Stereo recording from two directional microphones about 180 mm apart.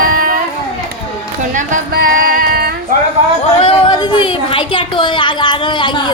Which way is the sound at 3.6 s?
25° left (ahead or behind).